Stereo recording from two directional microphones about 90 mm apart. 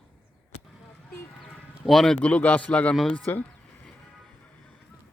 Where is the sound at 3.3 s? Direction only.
20° left (ahead or behind).